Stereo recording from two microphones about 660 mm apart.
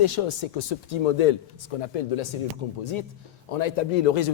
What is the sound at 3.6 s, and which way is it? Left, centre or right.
Speech, left.